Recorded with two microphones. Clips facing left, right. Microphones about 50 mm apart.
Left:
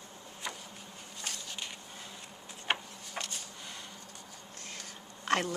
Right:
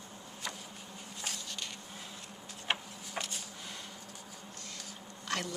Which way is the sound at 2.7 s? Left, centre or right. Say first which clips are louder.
Left 2 dB; centre.